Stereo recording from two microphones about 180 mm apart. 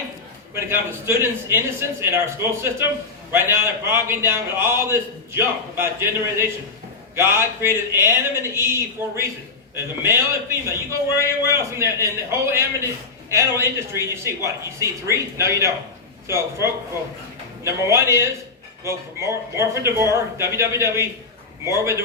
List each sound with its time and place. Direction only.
0.5 s a man's voice: 15° right (ahead or behind)